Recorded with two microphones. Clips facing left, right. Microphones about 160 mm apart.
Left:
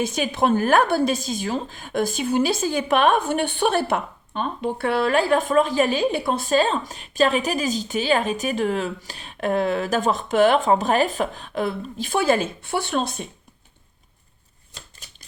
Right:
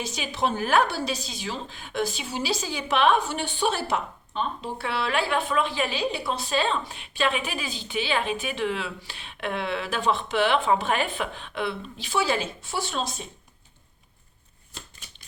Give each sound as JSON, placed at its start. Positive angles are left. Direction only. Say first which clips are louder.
{"t": 0.0, "sound": "a woman's voice", "louder": "left 6 dB", "side_deg": 50}